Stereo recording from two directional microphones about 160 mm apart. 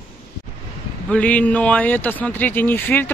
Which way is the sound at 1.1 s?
10° left (ahead or behind).